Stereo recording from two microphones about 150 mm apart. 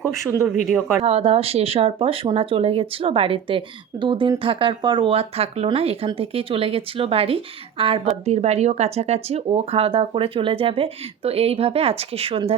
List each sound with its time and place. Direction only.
0.7 s speech: centre (ahead or behind)
1.0 s speech: 40° right (ahead or behind)